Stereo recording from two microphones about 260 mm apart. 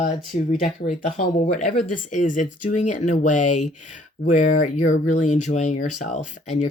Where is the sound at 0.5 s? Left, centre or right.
Left.